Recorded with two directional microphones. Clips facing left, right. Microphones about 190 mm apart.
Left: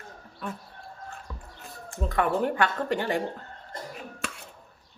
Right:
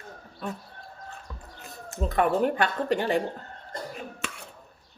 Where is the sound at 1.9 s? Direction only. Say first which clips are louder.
Right 2 dB; 20° right (ahead or behind).